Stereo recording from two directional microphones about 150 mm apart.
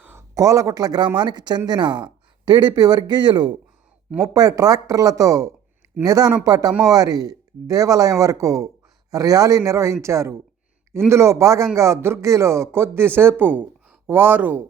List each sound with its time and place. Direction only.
0.0 s speech: 15° right (ahead or behind)